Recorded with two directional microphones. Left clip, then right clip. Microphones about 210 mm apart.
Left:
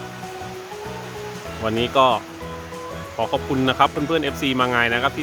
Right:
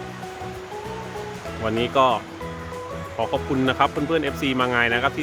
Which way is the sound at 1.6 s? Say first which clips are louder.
Left 2 dB; 15° left (ahead or behind).